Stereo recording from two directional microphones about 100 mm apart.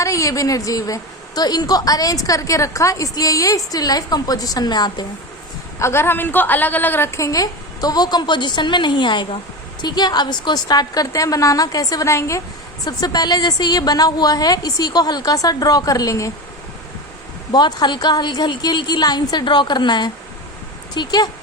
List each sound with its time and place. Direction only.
0.0 s a woman's voice: 35° left (ahead or behind)
5.8 s a woman's voice: 25° left (ahead or behind)
12.8 s a woman's voice: 40° left (ahead or behind)
17.5 s a woman's voice: 45° left (ahead or behind)